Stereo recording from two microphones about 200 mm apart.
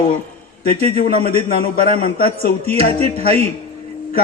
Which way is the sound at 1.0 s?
45° left (ahead or behind).